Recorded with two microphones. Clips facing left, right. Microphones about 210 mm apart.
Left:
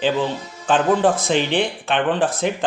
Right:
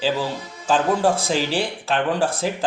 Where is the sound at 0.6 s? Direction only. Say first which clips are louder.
Left 2 dB; centre (ahead or behind).